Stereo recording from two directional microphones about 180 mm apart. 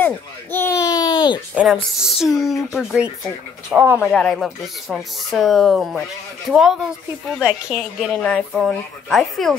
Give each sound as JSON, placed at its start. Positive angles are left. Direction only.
{"t": 0.0, "sound": "a sound", "side_deg": 10}
{"t": 1.5, "sound": "speech", "side_deg": -5}
{"t": 4.0, "sound": "speech", "side_deg": 5}